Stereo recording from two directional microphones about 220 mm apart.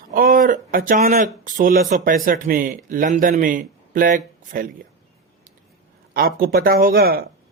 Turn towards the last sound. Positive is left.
turn(degrees=-40)  # may be behind; listen again after turning